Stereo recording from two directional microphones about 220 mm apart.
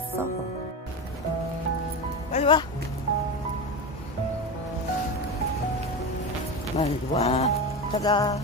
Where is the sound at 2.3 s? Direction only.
25° left (ahead or behind).